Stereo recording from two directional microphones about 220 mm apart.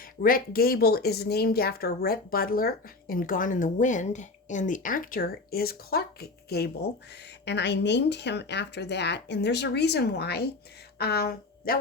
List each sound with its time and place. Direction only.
0.0 s a woman's voice: 40° left (ahead or behind)